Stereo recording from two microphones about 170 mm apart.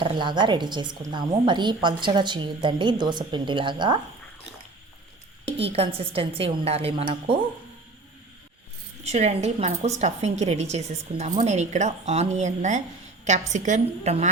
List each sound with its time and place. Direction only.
0.0 s a woman's voice: 30° right (ahead or behind)
5.5 s a woman's voice: 35° right (ahead or behind)
9.0 s a woman's voice: 40° right (ahead or behind)